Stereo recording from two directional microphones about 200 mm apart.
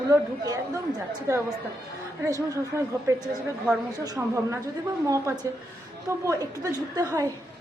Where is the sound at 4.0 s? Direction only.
15° right (ahead or behind).